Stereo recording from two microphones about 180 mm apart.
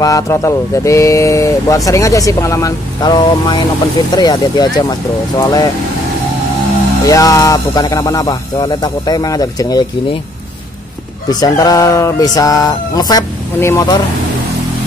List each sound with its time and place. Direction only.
0.0 s speech: 20° left (ahead or behind)
7.1 s speech: 20° left (ahead or behind)
11.2 s speech: 20° left (ahead or behind)